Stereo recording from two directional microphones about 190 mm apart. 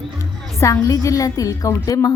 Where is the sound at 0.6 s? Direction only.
15° left (ahead or behind).